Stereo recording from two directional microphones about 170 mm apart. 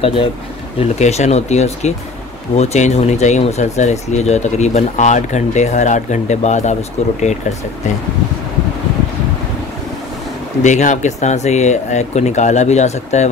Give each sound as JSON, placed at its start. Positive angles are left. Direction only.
{"t": 0.0, "sound": "speech", "side_deg": 30}
{"t": 0.7, "sound": "speech", "side_deg": 40}
{"t": 10.6, "sound": "speech", "side_deg": 45}